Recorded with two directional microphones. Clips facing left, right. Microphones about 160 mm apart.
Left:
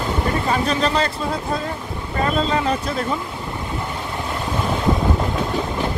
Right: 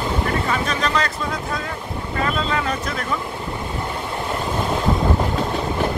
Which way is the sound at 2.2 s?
35° left (ahead or behind).